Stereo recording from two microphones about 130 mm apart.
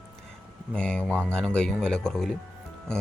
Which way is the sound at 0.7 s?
10° left (ahead or behind).